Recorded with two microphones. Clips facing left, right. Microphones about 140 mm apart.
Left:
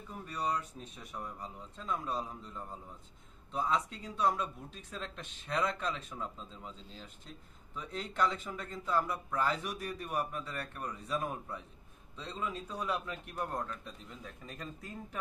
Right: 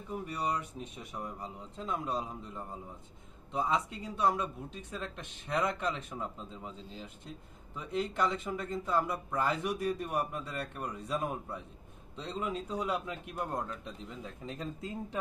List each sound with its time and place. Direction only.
0.1 s a man's voice: 15° right (ahead or behind)